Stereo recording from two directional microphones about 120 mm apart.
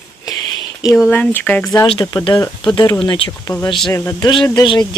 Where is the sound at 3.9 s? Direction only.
25° left (ahead or behind).